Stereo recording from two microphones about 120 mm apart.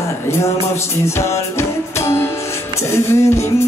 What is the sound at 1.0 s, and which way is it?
Music, 25° left (ahead or behind).